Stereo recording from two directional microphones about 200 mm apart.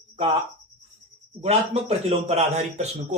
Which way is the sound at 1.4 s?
30° right (ahead or behind).